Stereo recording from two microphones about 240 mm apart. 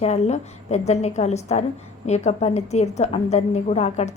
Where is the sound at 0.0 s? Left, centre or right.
Left.